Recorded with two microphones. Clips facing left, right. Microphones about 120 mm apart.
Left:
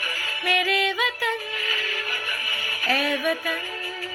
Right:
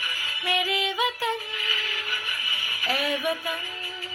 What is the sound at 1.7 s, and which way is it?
Music, 55° left (ahead or behind).